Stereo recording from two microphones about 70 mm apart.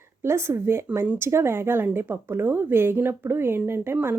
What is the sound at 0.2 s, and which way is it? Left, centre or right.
Speech, right.